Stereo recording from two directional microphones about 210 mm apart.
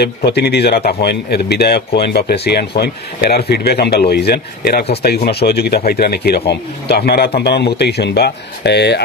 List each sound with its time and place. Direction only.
0.0 s speech: 50° left (ahead or behind)